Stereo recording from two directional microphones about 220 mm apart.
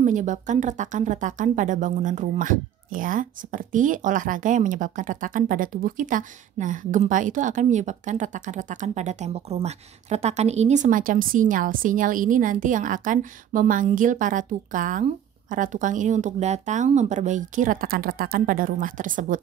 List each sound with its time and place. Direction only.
0.0 s speech: 35° right (ahead or behind)